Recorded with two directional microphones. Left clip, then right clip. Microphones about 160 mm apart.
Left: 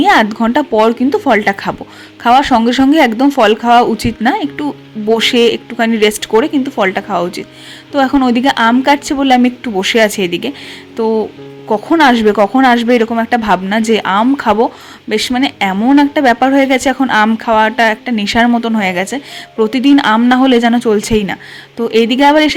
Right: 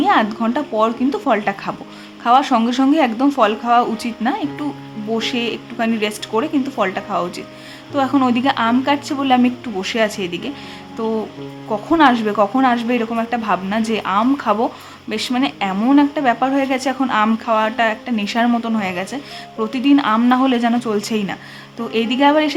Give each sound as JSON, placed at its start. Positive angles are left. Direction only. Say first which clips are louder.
{"t": 0.0, "sound": "a woman's voice", "louder": "left 6 dB", "side_deg": 35}
{"t": 10.9, "sound": "a woman's voice", "louder": "left 8 dB", "side_deg": 30}